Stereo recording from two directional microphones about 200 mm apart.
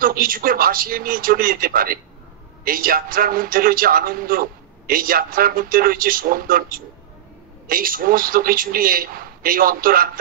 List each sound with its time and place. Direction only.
0.0 s a man's voice: 45° right (ahead or behind)